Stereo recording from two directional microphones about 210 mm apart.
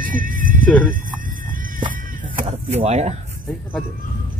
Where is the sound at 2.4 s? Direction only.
30° right (ahead or behind).